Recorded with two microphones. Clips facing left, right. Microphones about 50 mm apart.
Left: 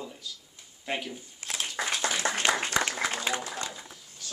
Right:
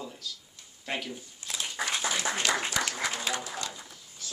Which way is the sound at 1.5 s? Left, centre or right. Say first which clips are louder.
Left 1 dB; left.